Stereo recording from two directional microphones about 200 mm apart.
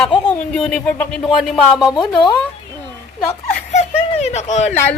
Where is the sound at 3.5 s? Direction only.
35° left (ahead or behind).